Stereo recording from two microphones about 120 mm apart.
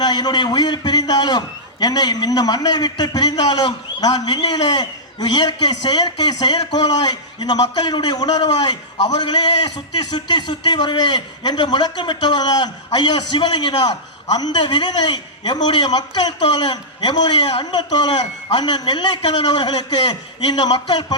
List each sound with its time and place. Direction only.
0.0 s speech: 35° left (ahead or behind)